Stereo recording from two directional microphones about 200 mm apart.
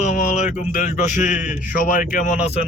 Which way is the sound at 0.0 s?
40° left (ahead or behind).